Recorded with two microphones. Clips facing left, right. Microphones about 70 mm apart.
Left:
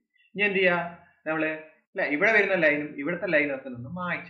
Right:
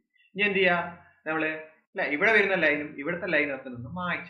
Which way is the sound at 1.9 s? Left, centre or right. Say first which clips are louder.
Left 1 dB; left.